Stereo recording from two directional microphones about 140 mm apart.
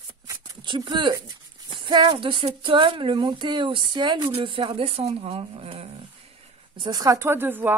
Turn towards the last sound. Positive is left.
turn(degrees=-15)  # may be behind; listen again after turning